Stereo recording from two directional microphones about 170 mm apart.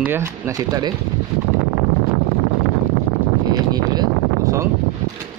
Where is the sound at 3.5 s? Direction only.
25° right (ahead or behind).